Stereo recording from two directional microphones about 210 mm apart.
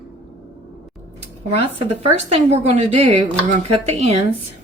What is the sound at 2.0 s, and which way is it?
A woman's voice, 30° right (ahead or behind).